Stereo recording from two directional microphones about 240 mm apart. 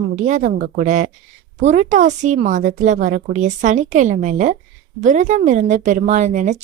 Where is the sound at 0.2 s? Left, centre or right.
Right.